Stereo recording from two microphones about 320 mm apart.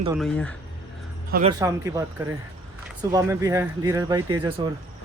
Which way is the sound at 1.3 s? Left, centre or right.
Centre.